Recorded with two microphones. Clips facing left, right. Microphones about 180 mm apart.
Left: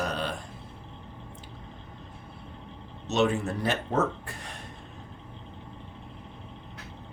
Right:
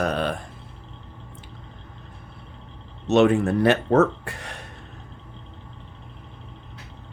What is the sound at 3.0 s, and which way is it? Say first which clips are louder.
Speech: right 8 dB; 60° right (ahead or behind).